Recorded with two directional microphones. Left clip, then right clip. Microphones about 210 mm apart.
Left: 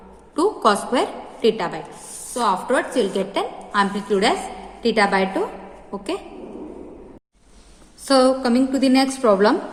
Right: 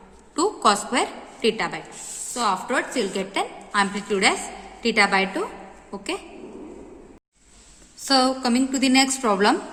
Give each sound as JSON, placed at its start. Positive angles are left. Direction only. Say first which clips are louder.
{"t": 0.3, "sound": "a woman's voice", "louder": "left 2 dB", "side_deg": -20}
{"t": 8.0, "sound": "a woman's voice", "louder": "left 4 dB", "side_deg": -20}